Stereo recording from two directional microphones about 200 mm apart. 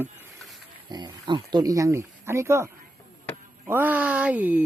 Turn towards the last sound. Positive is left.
turn(degrees=-10)  # may be behind; listen again after turning